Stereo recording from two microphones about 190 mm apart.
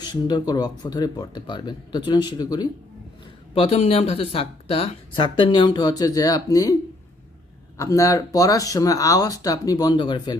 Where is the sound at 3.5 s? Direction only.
30° left (ahead or behind).